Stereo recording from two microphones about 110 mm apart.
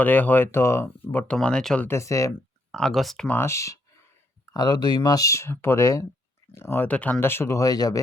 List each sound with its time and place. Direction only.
0.0 s speech: 15° left (ahead or behind)
1.1 s speech: 10° left (ahead or behind)
1.9 s speech: 30° left (ahead or behind)
2.7 s speech: 5° left (ahead or behind)
3.2 s speech: 20° left (ahead or behind)
4.5 s speech: 35° left (ahead or behind)